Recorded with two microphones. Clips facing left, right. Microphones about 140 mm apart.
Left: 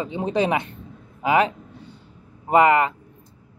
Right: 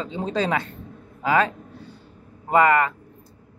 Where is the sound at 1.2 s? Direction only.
20° left (ahead or behind).